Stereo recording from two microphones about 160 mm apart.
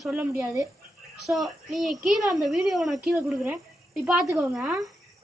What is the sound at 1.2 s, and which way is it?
Speech, centre (ahead or behind).